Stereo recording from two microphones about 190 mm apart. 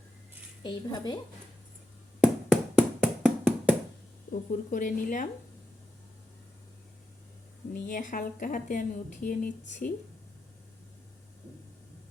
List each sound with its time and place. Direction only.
0.6 s speech: 20° left (ahead or behind)
2.2 s a sound: 5° right (ahead or behind)
4.3 s a woman's voice: 45° left (ahead or behind)
7.7 s a woman's voice: 45° left (ahead or behind)